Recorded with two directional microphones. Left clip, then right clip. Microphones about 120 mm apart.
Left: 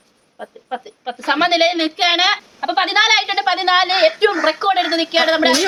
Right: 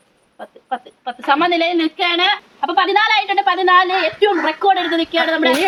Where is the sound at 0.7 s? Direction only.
35° left (ahead or behind).